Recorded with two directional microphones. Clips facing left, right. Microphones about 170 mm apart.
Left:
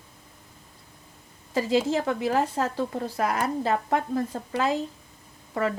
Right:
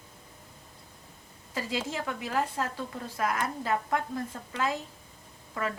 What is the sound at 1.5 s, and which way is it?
A woman's voice, 30° left (ahead or behind).